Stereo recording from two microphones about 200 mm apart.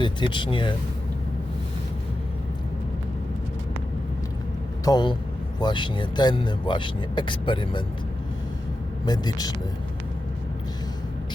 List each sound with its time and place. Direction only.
0.0 s speech: 25° left (ahead or behind)
4.9 s speech: 20° left (ahead or behind)
9.0 s speech: 20° left (ahead or behind)